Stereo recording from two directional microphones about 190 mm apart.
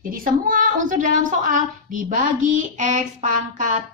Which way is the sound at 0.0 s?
45° right (ahead or behind).